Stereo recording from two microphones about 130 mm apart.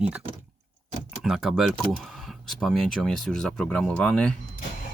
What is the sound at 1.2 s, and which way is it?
Speech, 5° right (ahead or behind).